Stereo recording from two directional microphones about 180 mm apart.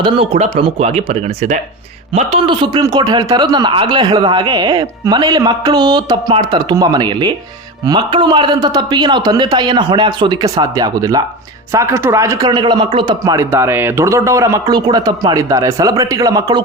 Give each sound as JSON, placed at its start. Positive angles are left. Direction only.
{"t": 0.0, "sound": "a man's voice", "side_deg": -30}